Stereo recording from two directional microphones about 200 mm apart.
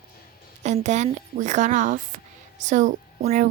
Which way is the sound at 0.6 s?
35° right (ahead or behind).